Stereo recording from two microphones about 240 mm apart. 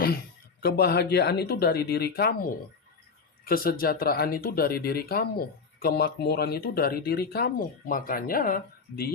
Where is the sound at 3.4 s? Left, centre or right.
Left.